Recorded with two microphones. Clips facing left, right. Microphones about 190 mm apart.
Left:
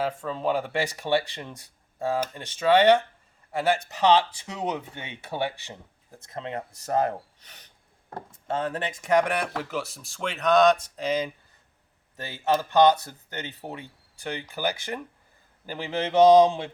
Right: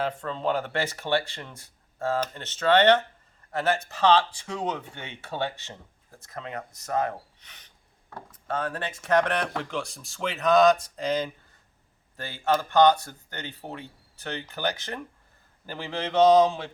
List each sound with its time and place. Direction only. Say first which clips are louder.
0.0 s speech: left 1 dB; 5° left (ahead or behind); by 7.6 s 35° left (ahead or behind)
8.3 s speech: left 2 dB; 25° left (ahead or behind); by 11.3 s 5° left (ahead or behind)
12.1 s speech: left 1 dB; 20° left (ahead or behind)
16.5 s mantra: left 3 dB; 25° left (ahead or behind)